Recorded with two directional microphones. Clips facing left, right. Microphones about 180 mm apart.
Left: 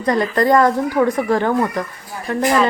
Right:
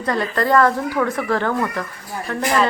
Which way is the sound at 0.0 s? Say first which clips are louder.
Left 4 dB; 15° left (ahead or behind).